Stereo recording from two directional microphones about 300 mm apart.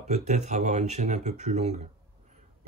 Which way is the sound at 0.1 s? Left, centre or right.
Right.